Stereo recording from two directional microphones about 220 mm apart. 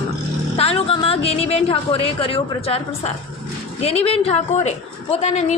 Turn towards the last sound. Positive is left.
turn(degrees=30)  # may be behind; listen again after turning